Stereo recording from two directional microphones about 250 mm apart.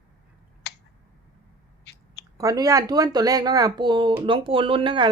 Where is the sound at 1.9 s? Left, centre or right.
Left.